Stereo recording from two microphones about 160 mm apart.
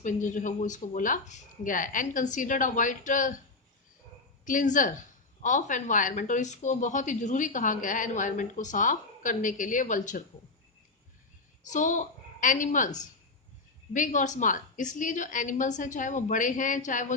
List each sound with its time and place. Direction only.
0.0 s speech: 55° left (ahead or behind)
4.4 s speech: 55° left (ahead or behind)
11.6 s a woman's voice: 50° left (ahead or behind)